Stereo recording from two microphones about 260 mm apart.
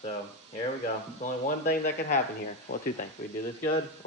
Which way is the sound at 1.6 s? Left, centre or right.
Left.